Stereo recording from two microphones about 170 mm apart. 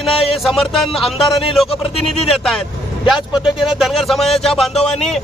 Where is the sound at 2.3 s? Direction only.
Centre (ahead or behind).